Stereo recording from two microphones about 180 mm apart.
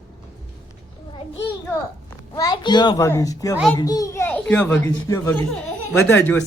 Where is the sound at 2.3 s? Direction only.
20° left (ahead or behind).